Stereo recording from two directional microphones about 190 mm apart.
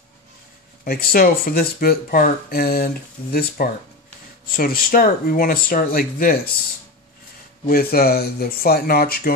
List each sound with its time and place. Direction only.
0.8 s speech: 55° left (ahead or behind)
7.6 s speech: 50° left (ahead or behind)